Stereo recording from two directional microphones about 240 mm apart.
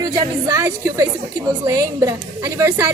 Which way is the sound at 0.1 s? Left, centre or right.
Centre.